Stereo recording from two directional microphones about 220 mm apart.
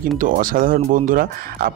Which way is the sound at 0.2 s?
40° right (ahead or behind).